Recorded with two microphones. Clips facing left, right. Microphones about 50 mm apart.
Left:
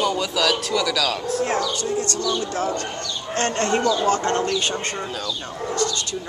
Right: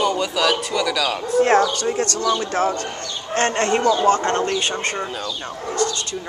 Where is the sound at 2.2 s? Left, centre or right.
Right.